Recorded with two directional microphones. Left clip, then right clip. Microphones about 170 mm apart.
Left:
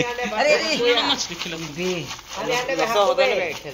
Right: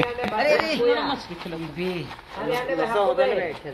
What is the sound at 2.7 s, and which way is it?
Speech, 40° right (ahead or behind).